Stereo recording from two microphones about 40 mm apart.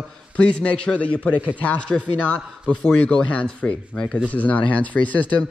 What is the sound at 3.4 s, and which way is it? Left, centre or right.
Speech, left.